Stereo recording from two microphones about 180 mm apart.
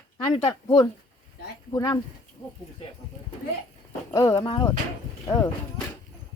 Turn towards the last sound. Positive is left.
turn(degrees=15)  # may be behind; listen again after turning